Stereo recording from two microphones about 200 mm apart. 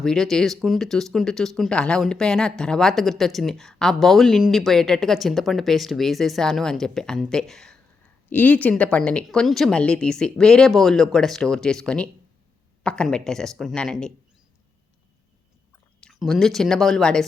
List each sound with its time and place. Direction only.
0.0 s speech: centre (ahead or behind)
16.0 s speech: centre (ahead or behind)